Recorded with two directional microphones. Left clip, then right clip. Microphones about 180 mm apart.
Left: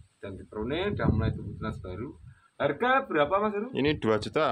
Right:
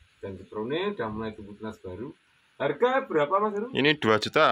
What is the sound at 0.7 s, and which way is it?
Speech, 40° left (ahead or behind).